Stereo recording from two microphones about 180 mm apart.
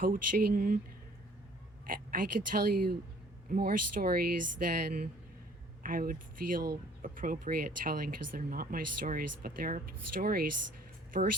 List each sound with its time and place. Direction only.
0.0 s speech: 50° right (ahead or behind)
1.9 s speech: 50° right (ahead or behind)